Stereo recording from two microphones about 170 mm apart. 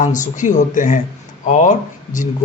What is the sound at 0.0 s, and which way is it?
A man's voice, 50° left (ahead or behind).